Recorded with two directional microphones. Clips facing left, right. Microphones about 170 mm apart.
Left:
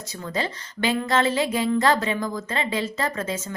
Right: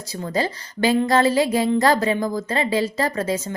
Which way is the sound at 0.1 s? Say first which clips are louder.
Right 5 dB; 35° right (ahead or behind).